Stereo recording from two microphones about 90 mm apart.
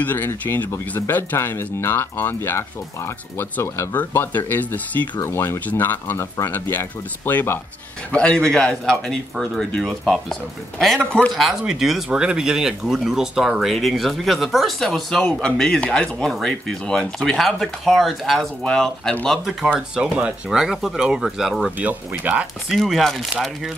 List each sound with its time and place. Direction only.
0.0 s speech: 20° left (ahead or behind)
5.2 s speech: 30° left (ahead or behind)
8.1 s a man's voice: 10° left (ahead or behind)
11.3 s a man's voice: 5° right (ahead or behind)
20.0 s speech: 15° right (ahead or behind)
20.4 s speech: 5° right (ahead or behind)
22.1 s speech: 20° right (ahead or behind)
22.7 s speech: centre (ahead or behind)